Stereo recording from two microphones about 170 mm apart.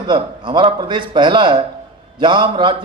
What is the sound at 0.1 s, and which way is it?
A man's voice, 25° right (ahead or behind).